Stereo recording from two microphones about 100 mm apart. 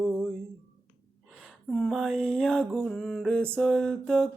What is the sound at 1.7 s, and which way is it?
Mantra, 5° left (ahead or behind).